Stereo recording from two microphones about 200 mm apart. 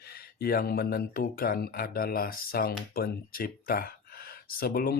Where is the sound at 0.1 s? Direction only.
50° left (ahead or behind).